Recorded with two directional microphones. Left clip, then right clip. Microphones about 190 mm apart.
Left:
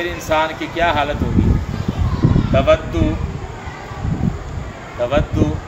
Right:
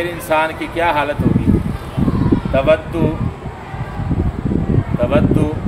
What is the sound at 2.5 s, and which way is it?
Speech, 20° right (ahead or behind).